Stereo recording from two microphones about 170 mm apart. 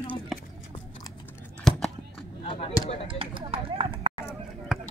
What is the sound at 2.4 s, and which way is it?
Speech, 30° left (ahead or behind).